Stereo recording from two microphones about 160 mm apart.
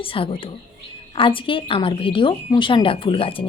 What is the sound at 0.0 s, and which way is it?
A woman's voice, 35° left (ahead or behind).